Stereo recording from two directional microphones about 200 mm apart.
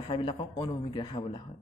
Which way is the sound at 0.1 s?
25° left (ahead or behind).